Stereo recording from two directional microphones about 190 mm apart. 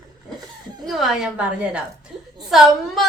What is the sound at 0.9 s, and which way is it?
A woman's voice, centre (ahead or behind).